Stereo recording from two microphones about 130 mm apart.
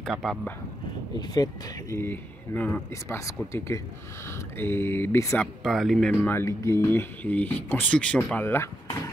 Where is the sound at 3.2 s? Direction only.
25° left (ahead or behind).